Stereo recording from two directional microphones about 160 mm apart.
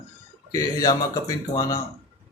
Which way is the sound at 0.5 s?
25° left (ahead or behind).